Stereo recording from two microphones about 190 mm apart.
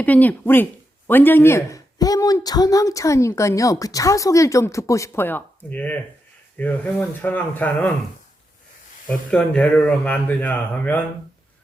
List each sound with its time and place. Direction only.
0.0 s speech: 10° left (ahead or behind)
9.0 s speech: 5° left (ahead or behind)